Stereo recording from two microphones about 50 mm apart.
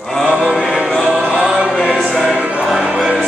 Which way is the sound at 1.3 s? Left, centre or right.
Right.